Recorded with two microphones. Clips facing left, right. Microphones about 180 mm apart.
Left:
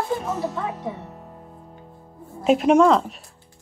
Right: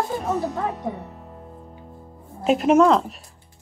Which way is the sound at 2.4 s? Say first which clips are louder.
Even; centre (ahead or behind).